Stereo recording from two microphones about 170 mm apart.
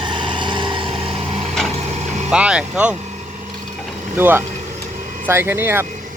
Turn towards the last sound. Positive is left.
turn(degrees=-15)  # may be behind; listen again after turning